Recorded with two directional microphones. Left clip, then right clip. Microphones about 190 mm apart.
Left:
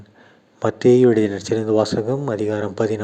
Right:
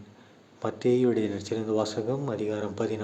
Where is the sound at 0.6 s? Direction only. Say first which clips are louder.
Left 11 dB; 40° left (ahead or behind).